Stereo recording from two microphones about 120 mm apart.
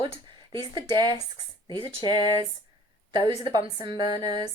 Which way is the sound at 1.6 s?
40° left (ahead or behind).